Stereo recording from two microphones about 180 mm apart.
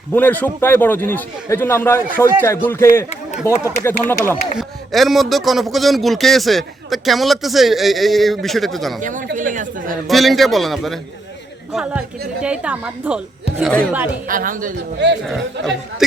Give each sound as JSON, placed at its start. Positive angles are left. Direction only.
{"t": 0.1, "sound": "a man's voice", "side_deg": 10}
{"t": 4.5, "sound": "a man's voice", "side_deg": 0}
{"t": 9.0, "sound": "a woman's voice", "side_deg": -45}
{"t": 10.1, "sound": "a man's voice", "side_deg": 0}
{"t": 13.6, "sound": "a man's voice", "side_deg": 5}
{"t": 14.3, "sound": "a woman's voice", "side_deg": -50}
{"t": 14.9, "sound": "speech", "side_deg": -75}